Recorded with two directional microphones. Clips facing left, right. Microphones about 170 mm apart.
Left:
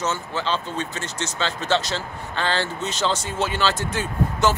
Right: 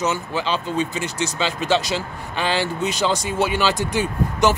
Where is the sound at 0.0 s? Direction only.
15° right (ahead or behind).